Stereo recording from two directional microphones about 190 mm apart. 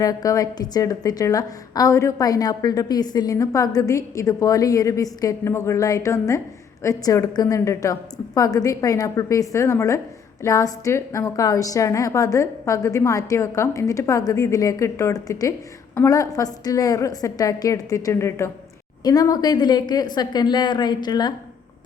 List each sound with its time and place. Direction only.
0.0 s a woman's voice: 20° left (ahead or behind)